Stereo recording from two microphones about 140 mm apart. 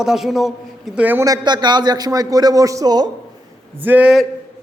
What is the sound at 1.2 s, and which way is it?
A man's voice, 30° right (ahead or behind).